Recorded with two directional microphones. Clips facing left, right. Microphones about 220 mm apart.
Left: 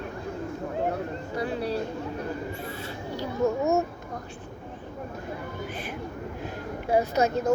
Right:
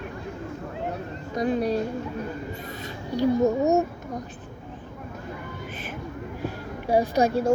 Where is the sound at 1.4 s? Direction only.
15° right (ahead or behind).